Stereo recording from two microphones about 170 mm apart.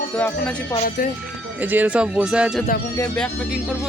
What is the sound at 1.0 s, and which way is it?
Speech, 60° left (ahead or behind).